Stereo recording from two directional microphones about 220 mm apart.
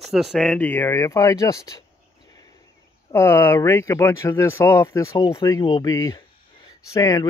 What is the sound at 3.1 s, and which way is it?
Speech, 10° left (ahead or behind).